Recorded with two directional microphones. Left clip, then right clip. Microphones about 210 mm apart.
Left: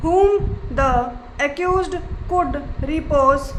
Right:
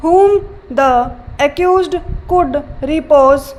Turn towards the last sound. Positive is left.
turn(degrees=-30)  # may be behind; listen again after turning